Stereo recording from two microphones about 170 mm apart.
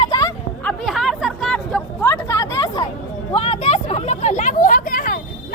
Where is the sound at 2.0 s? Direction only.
15° left (ahead or behind).